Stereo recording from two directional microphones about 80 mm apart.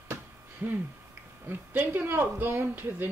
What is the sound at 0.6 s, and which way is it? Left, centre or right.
Speech, right.